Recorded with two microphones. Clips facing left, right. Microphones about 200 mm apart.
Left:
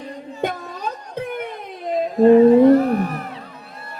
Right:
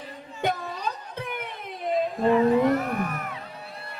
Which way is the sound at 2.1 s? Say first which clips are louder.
Left 11 dB; 40° left (ahead or behind).